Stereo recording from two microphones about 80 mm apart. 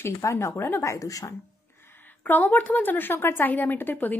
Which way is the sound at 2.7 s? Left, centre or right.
Left.